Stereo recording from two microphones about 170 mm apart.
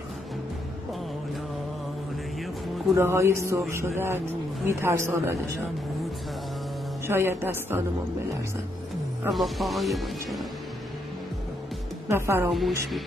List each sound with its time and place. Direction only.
2.9 s speech: 15° right (ahead or behind)
7.1 s speech: 15° right (ahead or behind)
9.3 s speech: centre (ahead or behind)
12.1 s speech: 15° right (ahead or behind)
12.4 s a woman's voice: centre (ahead or behind)